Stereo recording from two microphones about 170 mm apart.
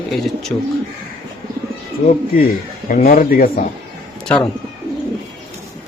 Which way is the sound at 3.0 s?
60° left (ahead or behind).